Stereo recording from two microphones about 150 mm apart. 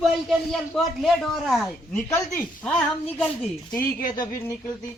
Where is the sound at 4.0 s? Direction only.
65° left (ahead or behind).